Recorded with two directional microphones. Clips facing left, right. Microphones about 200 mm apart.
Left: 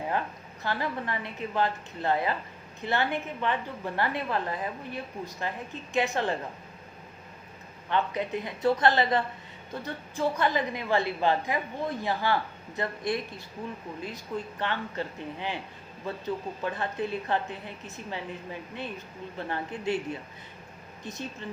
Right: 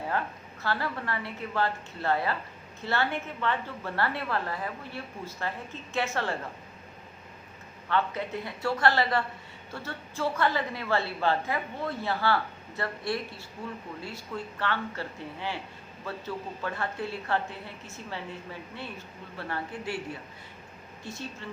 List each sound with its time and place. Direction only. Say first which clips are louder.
0.6 s a woman's voice: left 1 dB; 15° left (ahead or behind)
7.9 s a woman's voice: left 1 dB; 20° left (ahead or behind)
21.0 s a woman's voice: left 2 dB; 20° left (ahead or behind)